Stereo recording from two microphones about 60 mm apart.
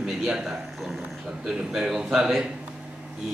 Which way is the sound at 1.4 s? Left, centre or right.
Centre.